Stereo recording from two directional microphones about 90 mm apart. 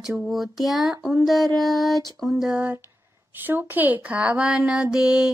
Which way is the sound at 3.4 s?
20° right (ahead or behind).